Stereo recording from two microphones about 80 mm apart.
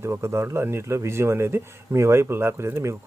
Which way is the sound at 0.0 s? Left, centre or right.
Right.